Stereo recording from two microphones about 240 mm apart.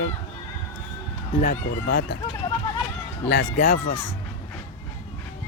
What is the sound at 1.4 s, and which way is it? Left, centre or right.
Speech, left.